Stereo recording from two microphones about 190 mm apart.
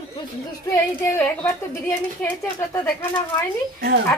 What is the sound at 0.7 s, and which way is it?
A woman's voice, 10° left (ahead or behind).